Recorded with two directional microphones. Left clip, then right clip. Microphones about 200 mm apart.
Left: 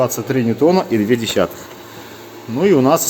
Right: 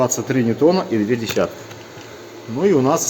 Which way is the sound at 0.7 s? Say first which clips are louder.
Left 4 dB; 50° left (ahead or behind).